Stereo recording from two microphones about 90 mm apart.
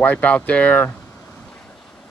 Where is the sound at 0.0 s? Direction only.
15° left (ahead or behind).